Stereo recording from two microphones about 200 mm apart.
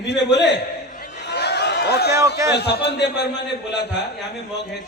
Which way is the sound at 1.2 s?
55° left (ahead or behind).